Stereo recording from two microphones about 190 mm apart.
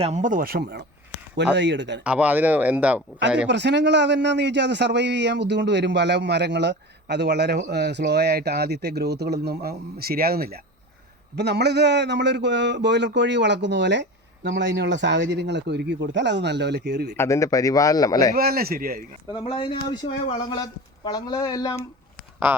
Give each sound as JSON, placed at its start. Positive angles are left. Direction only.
{"t": 0.0, "sound": "speech", "side_deg": -40}
{"t": 2.0, "sound": "speech", "side_deg": -10}
{"t": 3.4, "sound": "a man's voice", "side_deg": -65}
{"t": 17.2, "sound": "a man's voice", "side_deg": 15}
{"t": 18.3, "sound": "speech", "side_deg": -50}
{"t": 19.3, "sound": "speech", "side_deg": 25}